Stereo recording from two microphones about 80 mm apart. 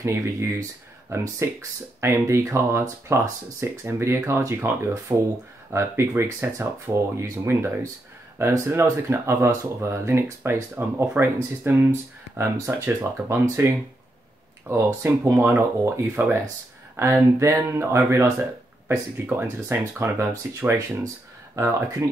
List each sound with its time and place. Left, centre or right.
0.0 s speech: right